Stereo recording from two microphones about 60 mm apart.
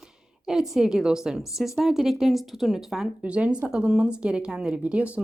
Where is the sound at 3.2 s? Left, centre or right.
Right.